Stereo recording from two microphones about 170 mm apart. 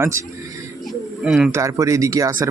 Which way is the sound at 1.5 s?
20° right (ahead or behind).